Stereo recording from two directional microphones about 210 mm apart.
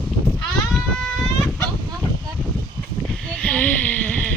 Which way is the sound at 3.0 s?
5° left (ahead or behind).